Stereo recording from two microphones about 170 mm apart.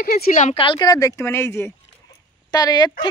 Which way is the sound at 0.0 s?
60° left (ahead or behind).